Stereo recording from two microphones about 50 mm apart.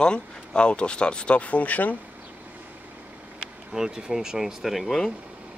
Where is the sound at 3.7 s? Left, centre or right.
Centre.